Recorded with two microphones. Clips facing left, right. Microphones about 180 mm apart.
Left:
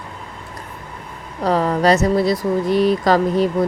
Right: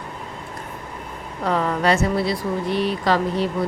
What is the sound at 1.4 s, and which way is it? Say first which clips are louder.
Speech: left 4 dB; 35° left (ahead or behind).